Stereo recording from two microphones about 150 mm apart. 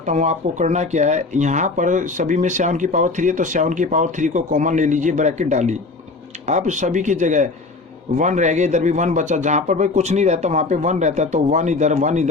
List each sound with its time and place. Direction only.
0.1 s a man's voice: 50° right (ahead or behind)